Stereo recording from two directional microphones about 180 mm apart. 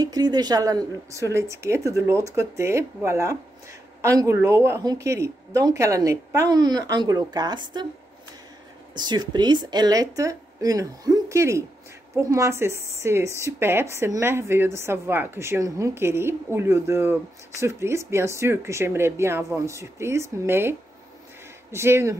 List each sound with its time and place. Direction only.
0.0 s speech: 20° right (ahead or behind)
8.9 s speech: 25° right (ahead or behind)
21.7 s speech: 15° right (ahead or behind)